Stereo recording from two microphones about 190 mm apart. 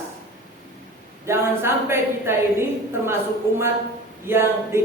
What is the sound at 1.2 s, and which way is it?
A woman's voice, 15° right (ahead or behind).